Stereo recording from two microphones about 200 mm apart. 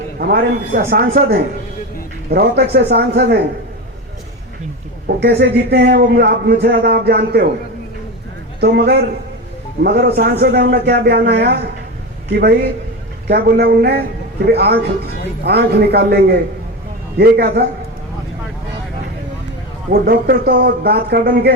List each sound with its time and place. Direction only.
0.2 s a man's voice: 50° right (ahead or behind)
5.0 s a man's voice: 55° right (ahead or behind)
8.6 s a man's voice: 55° right (ahead or behind)
19.9 s a man's voice: 50° right (ahead or behind)